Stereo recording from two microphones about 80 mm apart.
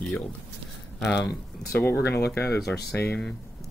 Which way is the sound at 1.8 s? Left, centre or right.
Left.